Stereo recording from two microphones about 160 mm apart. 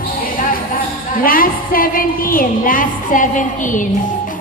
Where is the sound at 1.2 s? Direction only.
65° left (ahead or behind).